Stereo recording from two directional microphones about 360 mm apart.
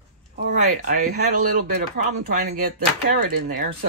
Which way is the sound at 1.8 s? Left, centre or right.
Right.